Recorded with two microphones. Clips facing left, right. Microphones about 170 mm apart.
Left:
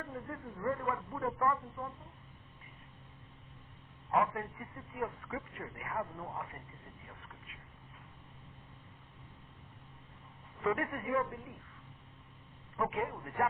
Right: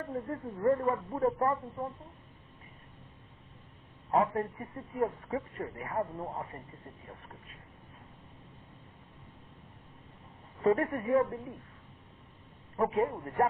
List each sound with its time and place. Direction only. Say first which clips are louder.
0.1 s a man's voice: right 7 dB; 35° right (ahead or behind)
4.1 s a man's voice: right 4 dB; 35° right (ahead or behind)
10.6 s a man's voice: right 7 dB; 35° right (ahead or behind)
12.7 s a man's voice: right 6 dB; 35° right (ahead or behind)